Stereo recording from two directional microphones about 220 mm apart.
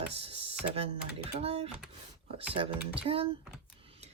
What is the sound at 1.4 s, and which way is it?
Speech, 25° right (ahead or behind).